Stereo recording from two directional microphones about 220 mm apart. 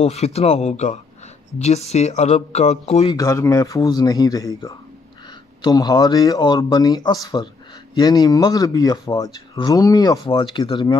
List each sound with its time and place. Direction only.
0.0 s speech: 30° left (ahead or behind)
3.2 s speech: 15° left (ahead or behind)
5.6 s speech: 20° left (ahead or behind)